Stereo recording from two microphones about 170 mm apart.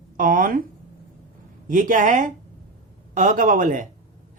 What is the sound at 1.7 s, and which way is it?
Speech, 50° right (ahead or behind).